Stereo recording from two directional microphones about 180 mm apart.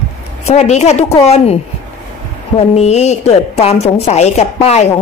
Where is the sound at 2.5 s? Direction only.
35° left (ahead or behind).